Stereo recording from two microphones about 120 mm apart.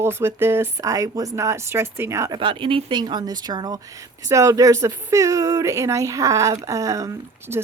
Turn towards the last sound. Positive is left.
turn(degrees=-25)  # may be behind; listen again after turning